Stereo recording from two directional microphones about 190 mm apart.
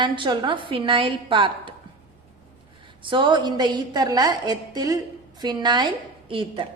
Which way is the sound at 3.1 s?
25° right (ahead or behind).